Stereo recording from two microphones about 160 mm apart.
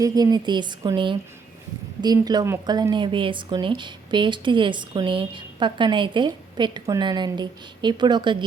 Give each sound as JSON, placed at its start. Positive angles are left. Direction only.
{"t": 0.0, "sound": "a woman's voice", "side_deg": -25}